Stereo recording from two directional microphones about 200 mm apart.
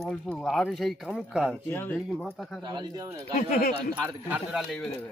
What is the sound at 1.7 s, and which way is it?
Speech, 10° left (ahead or behind).